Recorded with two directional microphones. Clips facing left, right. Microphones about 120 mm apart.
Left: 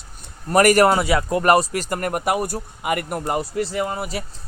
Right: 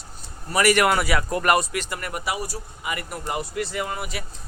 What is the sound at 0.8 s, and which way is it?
Speech, 25° left (ahead or behind).